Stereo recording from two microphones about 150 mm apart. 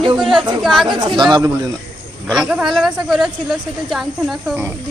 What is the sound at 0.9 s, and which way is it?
Speech, 30° right (ahead or behind).